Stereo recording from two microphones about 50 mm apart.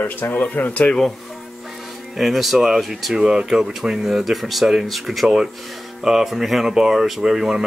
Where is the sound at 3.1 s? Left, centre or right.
Centre.